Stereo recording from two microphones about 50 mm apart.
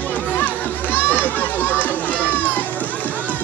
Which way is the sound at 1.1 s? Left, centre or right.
Left.